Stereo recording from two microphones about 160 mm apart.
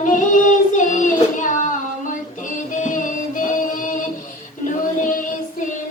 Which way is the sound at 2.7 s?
55° left (ahead or behind).